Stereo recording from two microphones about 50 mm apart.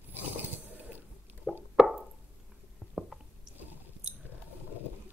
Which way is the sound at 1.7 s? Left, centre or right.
Centre.